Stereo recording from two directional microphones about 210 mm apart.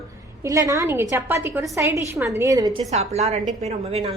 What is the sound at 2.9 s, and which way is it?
A woman's voice, 30° right (ahead or behind).